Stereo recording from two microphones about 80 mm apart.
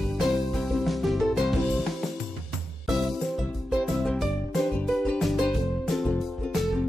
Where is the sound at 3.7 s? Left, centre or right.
Centre.